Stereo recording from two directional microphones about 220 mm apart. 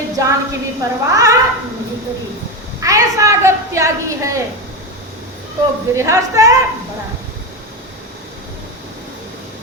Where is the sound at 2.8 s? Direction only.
15° right (ahead or behind).